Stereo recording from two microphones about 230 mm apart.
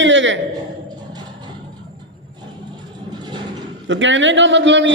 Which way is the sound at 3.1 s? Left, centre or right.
Centre.